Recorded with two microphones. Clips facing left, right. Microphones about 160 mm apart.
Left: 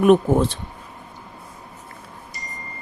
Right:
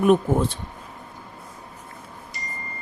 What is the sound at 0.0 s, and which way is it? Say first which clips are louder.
Speech: left 3 dB; 80° left.